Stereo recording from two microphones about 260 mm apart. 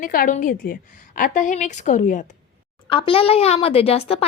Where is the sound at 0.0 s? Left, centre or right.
Left.